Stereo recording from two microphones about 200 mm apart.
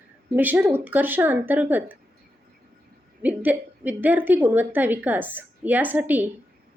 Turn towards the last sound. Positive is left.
turn(degrees=-10)  # may be behind; listen again after turning